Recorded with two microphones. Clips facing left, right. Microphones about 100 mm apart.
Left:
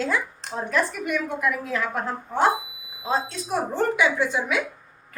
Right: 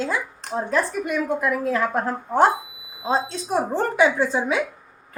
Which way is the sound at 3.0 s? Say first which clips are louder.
Right 3 dB; 30° right (ahead or behind).